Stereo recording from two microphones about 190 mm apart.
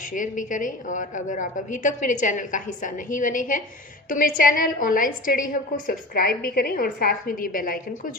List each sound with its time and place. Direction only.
0.1 s a woman's voice: 45° left (ahead or behind)